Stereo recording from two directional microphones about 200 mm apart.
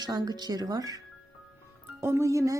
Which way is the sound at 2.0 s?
15° right (ahead or behind).